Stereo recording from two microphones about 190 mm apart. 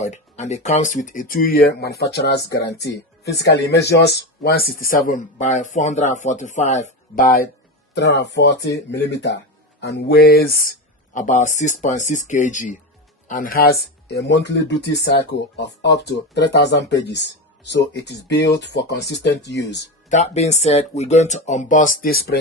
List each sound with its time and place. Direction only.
0.0 s speech: 35° left (ahead or behind)
7.9 s speech: 65° left (ahead or behind)
20.1 s speech: 35° left (ahead or behind)